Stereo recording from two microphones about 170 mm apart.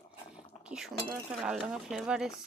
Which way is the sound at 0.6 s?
5° right (ahead or behind).